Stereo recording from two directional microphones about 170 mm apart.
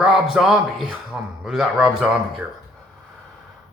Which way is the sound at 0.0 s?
Centre (ahead or behind).